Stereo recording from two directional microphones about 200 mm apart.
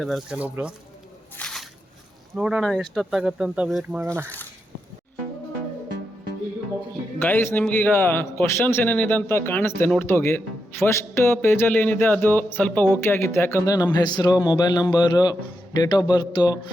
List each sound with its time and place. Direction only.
0.0 s speech: centre (ahead or behind)
1.4 s a sound: 5° left (ahead or behind)
2.3 s speech: 5° right (ahead or behind)
7.2 s a man's voice: 10° left (ahead or behind)